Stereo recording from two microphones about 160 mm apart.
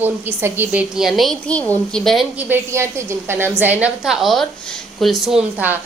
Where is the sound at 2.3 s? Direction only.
15° right (ahead or behind).